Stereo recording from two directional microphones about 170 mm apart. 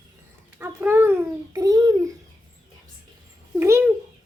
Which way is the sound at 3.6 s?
15° right (ahead or behind).